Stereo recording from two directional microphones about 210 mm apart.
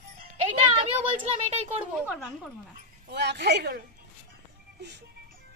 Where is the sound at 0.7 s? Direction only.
25° right (ahead or behind).